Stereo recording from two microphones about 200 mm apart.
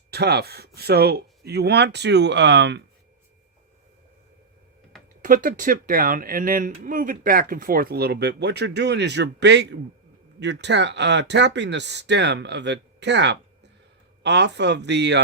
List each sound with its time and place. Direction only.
0.1 s speech: 55° right (ahead or behind)
5.2 s speech: 45° right (ahead or behind); by 15.2 s 60° right (ahead or behind)